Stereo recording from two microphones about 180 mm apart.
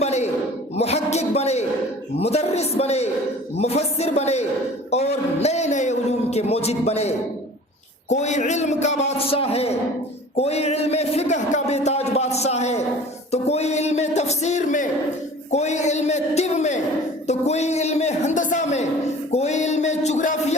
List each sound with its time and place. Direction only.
0.0 s a sound: 40° left (ahead or behind)
2.1 s a man's voice: 35° left (ahead or behind)
19.3 s music: 40° left (ahead or behind)